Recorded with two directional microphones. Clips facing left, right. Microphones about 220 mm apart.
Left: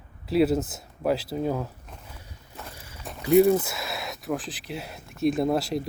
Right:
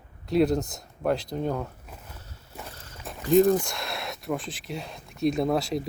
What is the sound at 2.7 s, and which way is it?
Walk, 10° left (ahead or behind).